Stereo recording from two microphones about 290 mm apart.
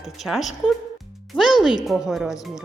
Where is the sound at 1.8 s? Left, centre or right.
Centre.